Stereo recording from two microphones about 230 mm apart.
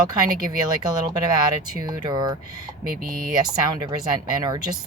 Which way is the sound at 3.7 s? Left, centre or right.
Centre.